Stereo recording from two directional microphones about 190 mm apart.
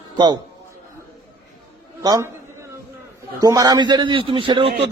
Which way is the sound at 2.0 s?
15° right (ahead or behind).